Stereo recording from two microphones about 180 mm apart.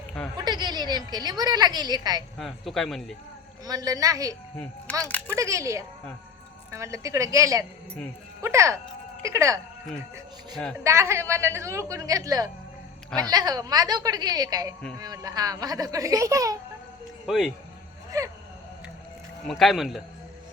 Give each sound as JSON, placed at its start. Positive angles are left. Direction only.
{"t": 0.3, "sound": "a woman's voice", "side_deg": -25}
{"t": 2.4, "sound": "a man's voice", "side_deg": 0}
{"t": 3.7, "sound": "speech", "side_deg": -20}
{"t": 4.5, "sound": "speech", "side_deg": 5}
{"t": 5.3, "sound": "a woman's voice", "side_deg": -15}
{"t": 10.8, "sound": "a woman's voice", "side_deg": -15}
{"t": 17.2, "sound": "speech", "side_deg": 0}
{"t": 18.1, "sound": "speech", "side_deg": -20}
{"t": 19.5, "sound": "a man's voice", "side_deg": 0}